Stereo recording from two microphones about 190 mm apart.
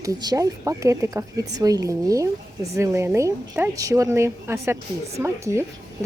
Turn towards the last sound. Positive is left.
turn(degrees=-15)  # may be behind; listen again after turning